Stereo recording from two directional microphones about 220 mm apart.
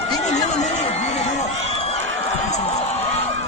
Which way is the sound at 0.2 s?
30° left (ahead or behind).